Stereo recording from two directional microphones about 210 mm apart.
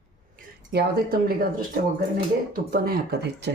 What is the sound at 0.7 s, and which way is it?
Speech, 50° right (ahead or behind).